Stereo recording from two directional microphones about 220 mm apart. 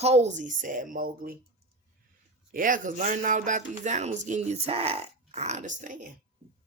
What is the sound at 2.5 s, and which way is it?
Speech, 40° right (ahead or behind).